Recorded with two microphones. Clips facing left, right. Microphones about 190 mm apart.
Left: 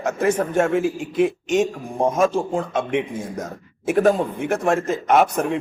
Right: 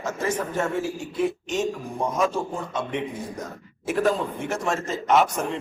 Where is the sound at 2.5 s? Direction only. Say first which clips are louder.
Left 7 dB; 90° left.